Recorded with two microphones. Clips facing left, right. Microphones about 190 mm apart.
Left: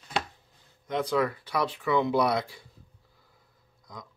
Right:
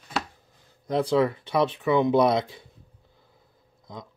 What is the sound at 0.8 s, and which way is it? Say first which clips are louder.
Speech: right 5 dB; 30° right (ahead or behind).